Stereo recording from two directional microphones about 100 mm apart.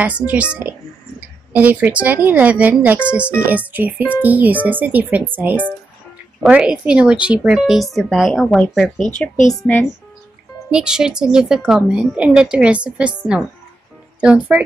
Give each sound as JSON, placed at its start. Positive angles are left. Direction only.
{"t": 0.3, "sound": "a woman's voice", "side_deg": -15}
{"t": 10.7, "sound": "a woman's voice", "side_deg": -5}